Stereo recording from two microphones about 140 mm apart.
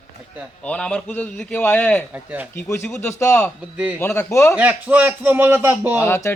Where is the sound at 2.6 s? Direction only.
20° left (ahead or behind).